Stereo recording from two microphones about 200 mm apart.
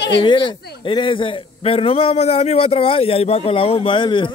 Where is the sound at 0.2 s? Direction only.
25° left (ahead or behind).